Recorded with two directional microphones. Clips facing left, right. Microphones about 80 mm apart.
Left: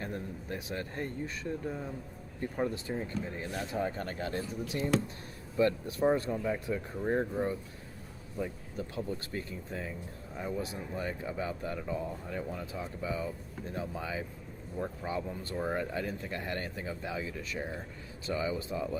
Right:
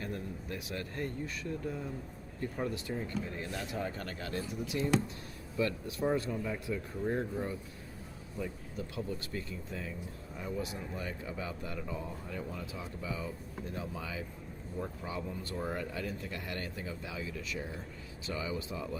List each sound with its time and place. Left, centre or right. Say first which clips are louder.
0.0 s speech: left 1 dB; left
9.3 s speech: left 2 dB; left